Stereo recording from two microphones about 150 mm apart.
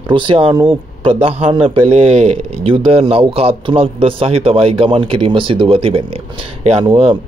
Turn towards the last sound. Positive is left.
turn(degrees=-35)  # may be behind; listen again after turning